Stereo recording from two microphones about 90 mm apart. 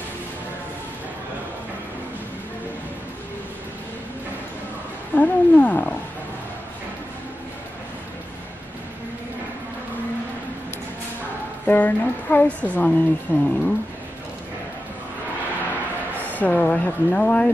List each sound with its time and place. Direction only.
5.1 s wild animals: 15° left (ahead or behind)
11.6 s female singing: 20° left (ahead or behind)
12.6 s speech: 15° left (ahead or behind)
16.2 s speech: 20° left (ahead or behind)